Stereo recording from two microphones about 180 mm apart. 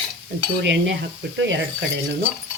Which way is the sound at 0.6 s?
80° right.